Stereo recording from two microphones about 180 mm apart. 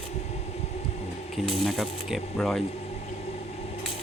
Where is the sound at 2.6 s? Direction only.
35° left (ahead or behind).